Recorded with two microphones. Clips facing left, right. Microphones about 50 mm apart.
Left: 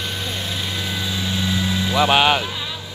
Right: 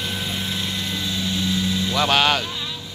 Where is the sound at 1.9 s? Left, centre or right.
Centre.